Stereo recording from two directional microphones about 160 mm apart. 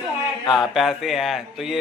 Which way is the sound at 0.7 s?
Centre (ahead or behind).